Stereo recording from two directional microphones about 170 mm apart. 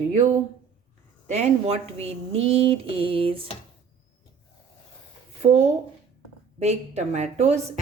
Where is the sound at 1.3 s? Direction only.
40° right (ahead or behind).